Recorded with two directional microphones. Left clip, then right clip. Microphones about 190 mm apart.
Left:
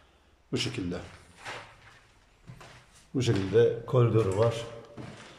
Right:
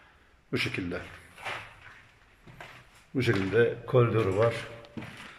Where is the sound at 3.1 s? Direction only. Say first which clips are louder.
Even; 15° left (ahead or behind).